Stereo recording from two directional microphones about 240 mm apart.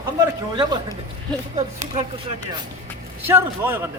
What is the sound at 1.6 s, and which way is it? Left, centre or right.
Speech, right.